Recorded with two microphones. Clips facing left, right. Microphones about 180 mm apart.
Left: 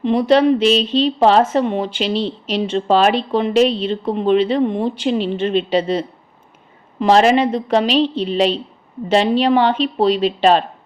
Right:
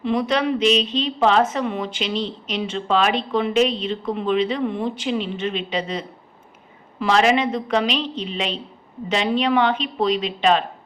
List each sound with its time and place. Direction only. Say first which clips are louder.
0.0 s speech: left 7 dB; 35° left (ahead or behind)